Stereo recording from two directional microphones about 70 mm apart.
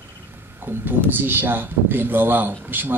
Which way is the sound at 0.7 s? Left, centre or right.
Right.